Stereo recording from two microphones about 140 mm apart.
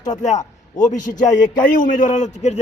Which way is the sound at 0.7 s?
65° left (ahead or behind).